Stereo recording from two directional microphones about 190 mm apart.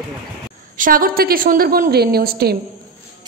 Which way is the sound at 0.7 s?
45° right (ahead or behind).